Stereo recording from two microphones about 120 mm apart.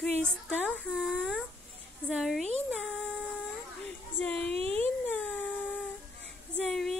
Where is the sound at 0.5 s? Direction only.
15° left (ahead or behind).